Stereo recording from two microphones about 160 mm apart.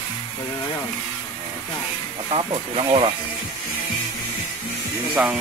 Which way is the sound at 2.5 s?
30° right (ahead or behind).